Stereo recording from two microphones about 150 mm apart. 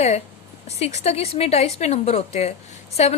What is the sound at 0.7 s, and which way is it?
A woman's voice, 45° left (ahead or behind).